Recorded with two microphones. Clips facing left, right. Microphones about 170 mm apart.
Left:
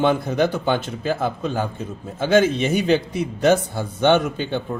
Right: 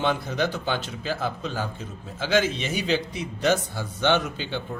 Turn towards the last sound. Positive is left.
turn(degrees=50)  # may be behind; listen again after turning